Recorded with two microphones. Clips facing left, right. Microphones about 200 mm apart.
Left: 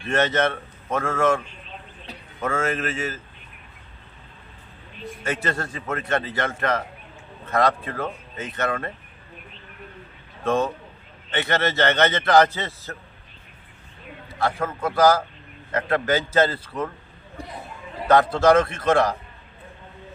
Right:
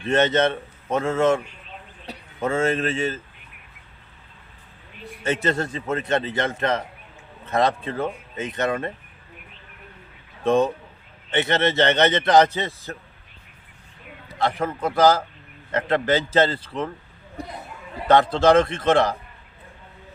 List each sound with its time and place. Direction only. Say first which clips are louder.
0.0 s a man's voice: right 2 dB; 20° right (ahead or behind)
5.2 s a man's voice: right 4 dB; 20° right (ahead or behind)
10.4 s a man's voice: right 3 dB; 20° right (ahead or behind)
14.4 s a man's voice: right 1 dB; 20° right (ahead or behind)
18.1 s a man's voice: right 1 dB; 25° right (ahead or behind)